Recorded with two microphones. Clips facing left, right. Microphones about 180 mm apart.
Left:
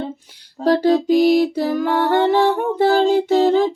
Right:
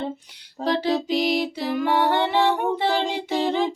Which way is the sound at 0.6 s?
45° left (ahead or behind).